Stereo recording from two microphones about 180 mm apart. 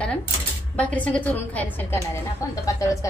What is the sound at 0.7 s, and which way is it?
A woman's voice, 10° left (ahead or behind).